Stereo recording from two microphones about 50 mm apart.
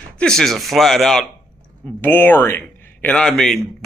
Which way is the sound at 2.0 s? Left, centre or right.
Left.